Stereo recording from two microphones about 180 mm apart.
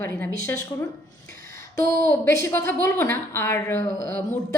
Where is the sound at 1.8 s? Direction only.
55° right (ahead or behind).